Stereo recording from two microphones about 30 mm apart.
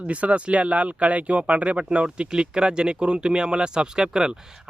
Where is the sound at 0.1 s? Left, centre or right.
Right.